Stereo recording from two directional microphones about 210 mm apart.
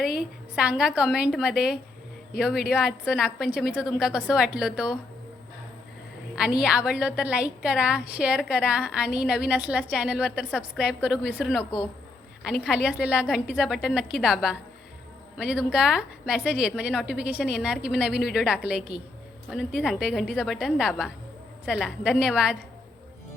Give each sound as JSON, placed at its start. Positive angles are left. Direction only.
{"t": 0.5, "sound": "a woman's voice", "side_deg": -5}
{"t": 6.6, "sound": "a woman's voice", "side_deg": -5}
{"t": 12.6, "sound": "a woman's voice", "side_deg": -5}